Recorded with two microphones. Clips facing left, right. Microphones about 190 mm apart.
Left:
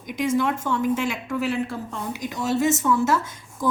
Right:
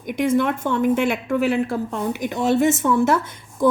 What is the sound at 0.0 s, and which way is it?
Speech, 60° right (ahead or behind).